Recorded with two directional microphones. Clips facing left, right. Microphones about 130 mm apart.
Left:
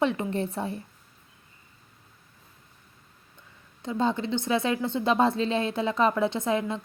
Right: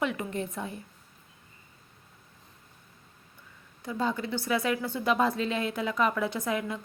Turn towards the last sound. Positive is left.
turn(degrees=25)  # may be behind; listen again after turning